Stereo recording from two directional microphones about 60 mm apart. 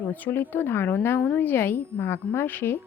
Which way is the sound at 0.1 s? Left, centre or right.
Left.